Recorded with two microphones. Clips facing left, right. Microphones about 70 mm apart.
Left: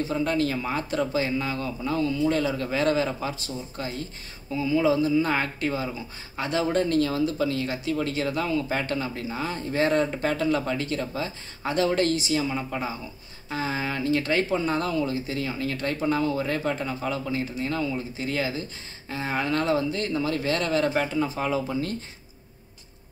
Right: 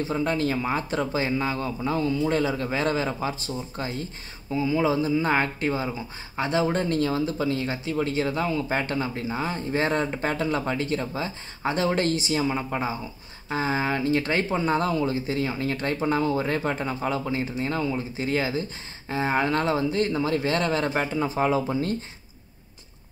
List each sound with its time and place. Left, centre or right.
0.1 s speech: right